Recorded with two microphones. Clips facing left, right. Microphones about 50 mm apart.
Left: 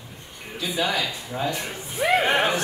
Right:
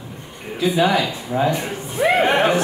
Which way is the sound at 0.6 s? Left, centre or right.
Right.